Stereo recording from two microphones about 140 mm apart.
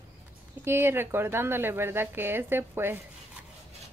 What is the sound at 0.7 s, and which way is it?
Speech, 15° right (ahead or behind).